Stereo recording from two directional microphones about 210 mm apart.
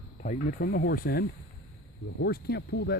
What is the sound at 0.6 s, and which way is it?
Speech, 50° left (ahead or behind).